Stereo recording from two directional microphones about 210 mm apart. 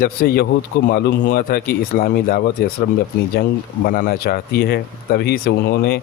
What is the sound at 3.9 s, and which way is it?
Speech, 45° left (ahead or behind).